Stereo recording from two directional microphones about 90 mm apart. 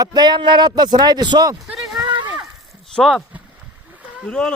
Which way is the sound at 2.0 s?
55° right (ahead or behind).